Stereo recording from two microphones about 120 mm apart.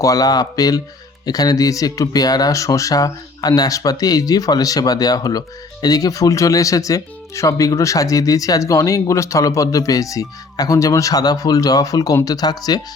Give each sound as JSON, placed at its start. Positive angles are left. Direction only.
{"t": 0.0, "sound": "speech", "side_deg": 30}